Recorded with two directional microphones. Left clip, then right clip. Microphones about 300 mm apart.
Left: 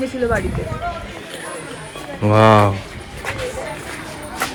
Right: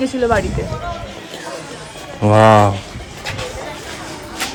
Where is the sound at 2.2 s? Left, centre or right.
Centre.